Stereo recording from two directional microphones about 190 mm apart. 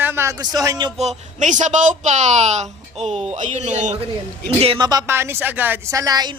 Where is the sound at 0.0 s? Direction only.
10° right (ahead or behind).